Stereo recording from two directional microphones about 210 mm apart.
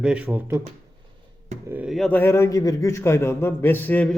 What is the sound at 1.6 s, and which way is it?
A man's voice, 5° right (ahead or behind).